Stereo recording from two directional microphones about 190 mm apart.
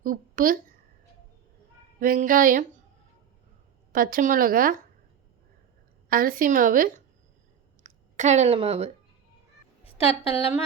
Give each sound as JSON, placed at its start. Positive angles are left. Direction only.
{"t": 0.0, "sound": "speech", "side_deg": -50}
{"t": 2.0, "sound": "a woman's voice", "side_deg": -45}
{"t": 3.9, "sound": "a woman's voice", "side_deg": -50}
{"t": 6.1, "sound": "a woman's voice", "side_deg": -50}
{"t": 9.8, "sound": "a woman's voice", "side_deg": 30}